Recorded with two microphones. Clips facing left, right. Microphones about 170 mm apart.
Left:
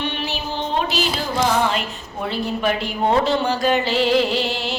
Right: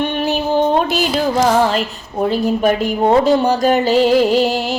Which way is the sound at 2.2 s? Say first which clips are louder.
Right 7 dB; 45° right (ahead or behind).